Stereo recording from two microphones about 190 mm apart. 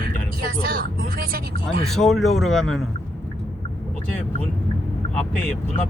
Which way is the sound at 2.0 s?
Centre (ahead or behind).